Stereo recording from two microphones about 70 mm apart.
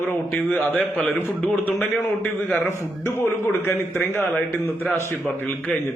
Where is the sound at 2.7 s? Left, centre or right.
Left.